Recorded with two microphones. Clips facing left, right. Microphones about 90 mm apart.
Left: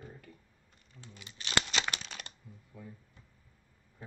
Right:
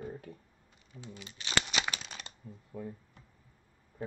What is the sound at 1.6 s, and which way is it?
Crumpling, 10° right (ahead or behind).